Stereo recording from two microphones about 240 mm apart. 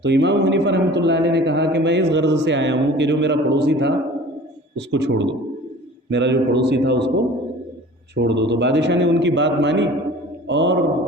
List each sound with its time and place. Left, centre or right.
0.0 s a man's voice: right
8.1 s a man's voice: right